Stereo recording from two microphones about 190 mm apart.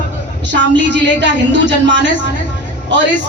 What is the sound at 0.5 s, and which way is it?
A woman's voice, 70° right (ahead or behind).